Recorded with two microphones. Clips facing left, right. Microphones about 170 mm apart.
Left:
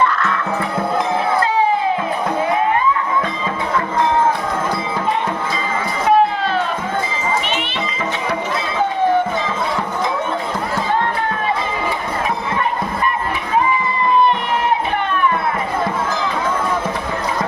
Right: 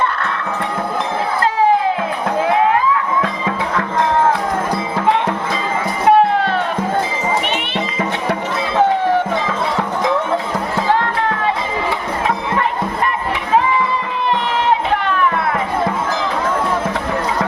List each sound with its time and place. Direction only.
2.5 s music: 85° right
6.1 s music: 65° right (ahead or behind)
8.3 s music: 75° right (ahead or behind)
13.7 s music: 90° right